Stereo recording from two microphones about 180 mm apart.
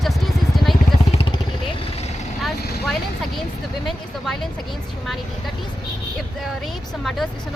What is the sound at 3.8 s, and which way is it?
Speech, centre (ahead or behind).